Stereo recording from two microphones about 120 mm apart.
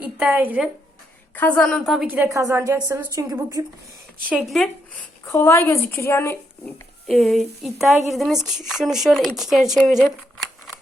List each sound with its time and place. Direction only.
0.0 s a woman's voice: 10° right (ahead or behind)
1.4 s a woman's voice: 10° left (ahead or behind)
2.0 s a woman's voice: 15° right (ahead or behind)
4.4 s a sound: 5° left (ahead or behind)
5.2 s speech: 20° left (ahead or behind)
7.1 s a sound: centre (ahead or behind)
8.6 s speech: 5° right (ahead or behind)